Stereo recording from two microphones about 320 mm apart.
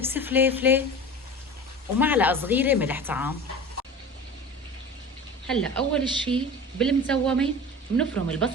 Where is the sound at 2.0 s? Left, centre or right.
Centre.